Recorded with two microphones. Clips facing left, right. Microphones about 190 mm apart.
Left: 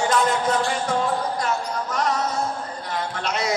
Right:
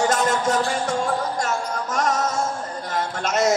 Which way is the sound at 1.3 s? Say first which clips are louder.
Even; 45° right (ahead or behind).